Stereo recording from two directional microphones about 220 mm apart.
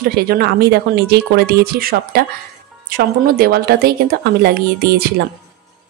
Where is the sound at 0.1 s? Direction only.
45° right (ahead or behind).